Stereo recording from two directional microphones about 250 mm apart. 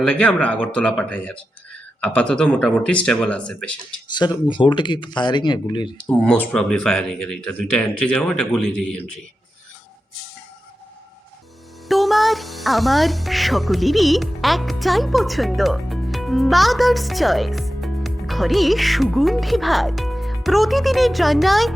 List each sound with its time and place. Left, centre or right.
0.1 s speech: centre
4.1 s speech: centre
6.2 s speech: centre
11.9 s speech: centre